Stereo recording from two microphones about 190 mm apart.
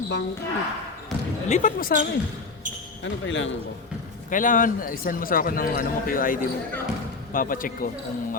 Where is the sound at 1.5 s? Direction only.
45° left (ahead or behind).